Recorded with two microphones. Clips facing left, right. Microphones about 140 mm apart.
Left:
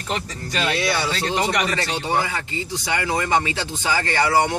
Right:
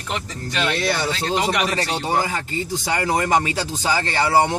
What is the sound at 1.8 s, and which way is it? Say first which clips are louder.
Speech: right 1 dB; 40° right (ahead or behind).